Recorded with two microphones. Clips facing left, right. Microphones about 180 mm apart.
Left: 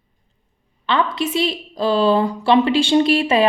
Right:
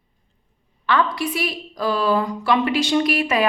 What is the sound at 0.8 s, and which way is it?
A woman's voice, 25° left (ahead or behind).